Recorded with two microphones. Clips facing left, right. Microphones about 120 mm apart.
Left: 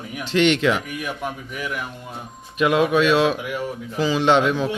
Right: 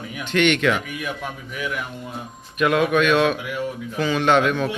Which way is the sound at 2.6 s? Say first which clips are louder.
Left 1 dB; 25° left (ahead or behind).